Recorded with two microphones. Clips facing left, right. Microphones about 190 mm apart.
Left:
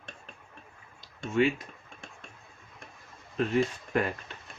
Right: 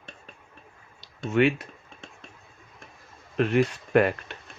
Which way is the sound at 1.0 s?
70° right (ahead or behind).